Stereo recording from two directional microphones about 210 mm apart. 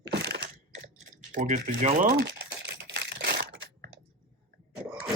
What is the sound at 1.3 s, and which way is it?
Speech, 35° right (ahead or behind).